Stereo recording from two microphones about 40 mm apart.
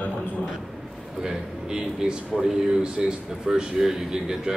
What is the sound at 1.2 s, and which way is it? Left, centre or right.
A man's voice, centre.